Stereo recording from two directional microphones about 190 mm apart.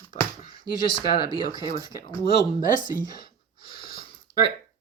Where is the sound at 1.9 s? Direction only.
55° left (ahead or behind).